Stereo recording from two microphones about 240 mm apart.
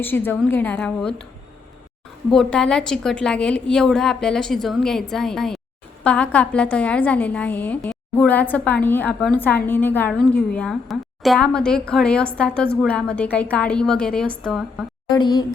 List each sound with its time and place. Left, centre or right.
0.0 s a woman's voice: centre
2.3 s a woman's voice: centre
15.1 s a woman's voice: centre